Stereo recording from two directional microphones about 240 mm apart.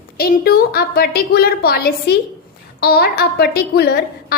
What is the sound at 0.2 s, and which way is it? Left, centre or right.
Speech, left.